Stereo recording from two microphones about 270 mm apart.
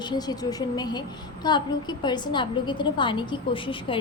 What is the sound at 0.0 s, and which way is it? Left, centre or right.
A woman's voice, centre.